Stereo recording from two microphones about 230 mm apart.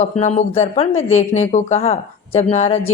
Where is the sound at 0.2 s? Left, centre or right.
Left.